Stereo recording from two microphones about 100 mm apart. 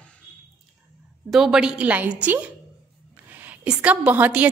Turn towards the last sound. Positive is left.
turn(degrees=-15)  # may be behind; listen again after turning